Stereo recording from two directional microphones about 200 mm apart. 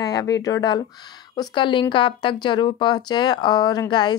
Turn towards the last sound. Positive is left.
turn(degrees=20)  # may be behind; listen again after turning